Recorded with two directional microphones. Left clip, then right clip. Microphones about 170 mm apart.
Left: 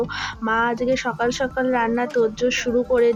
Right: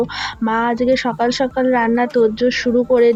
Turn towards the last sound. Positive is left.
turn(degrees=-30)  # may be behind; listen again after turning